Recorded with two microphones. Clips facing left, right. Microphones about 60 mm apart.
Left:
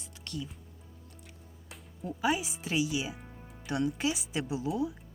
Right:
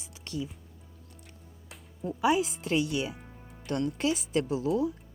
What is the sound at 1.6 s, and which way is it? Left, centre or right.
Speech, centre.